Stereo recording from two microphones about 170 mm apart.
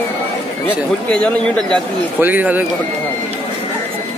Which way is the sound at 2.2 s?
10° right (ahead or behind).